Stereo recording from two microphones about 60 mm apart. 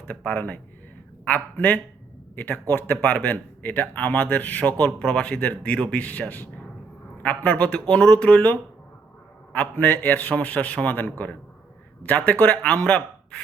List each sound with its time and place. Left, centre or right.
0.3 s a man's voice: left